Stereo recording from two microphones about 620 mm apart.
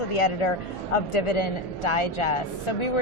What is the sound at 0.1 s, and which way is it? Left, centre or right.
Speech, left.